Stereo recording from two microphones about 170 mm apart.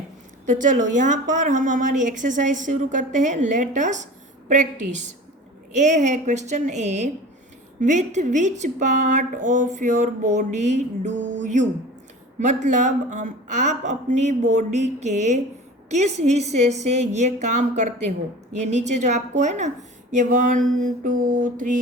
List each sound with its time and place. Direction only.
0.5 s a woman's voice: 45° right (ahead or behind)